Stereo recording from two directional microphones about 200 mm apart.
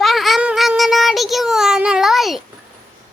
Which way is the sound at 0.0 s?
Centre (ahead or behind).